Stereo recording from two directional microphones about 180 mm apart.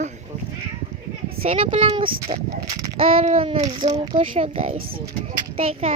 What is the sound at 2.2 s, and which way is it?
Speech, 20° right (ahead or behind).